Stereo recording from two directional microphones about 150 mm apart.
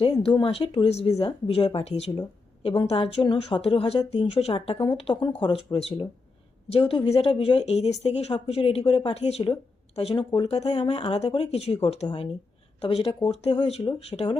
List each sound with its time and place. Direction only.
0.0 s a woman's voice: 35° left (ahead or behind)